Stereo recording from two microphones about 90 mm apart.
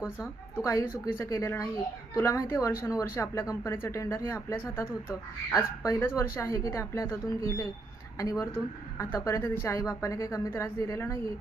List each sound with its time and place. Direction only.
0.6 s speech: 35° left (ahead or behind)